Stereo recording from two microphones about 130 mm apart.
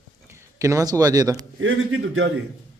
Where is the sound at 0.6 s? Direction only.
25° right (ahead or behind).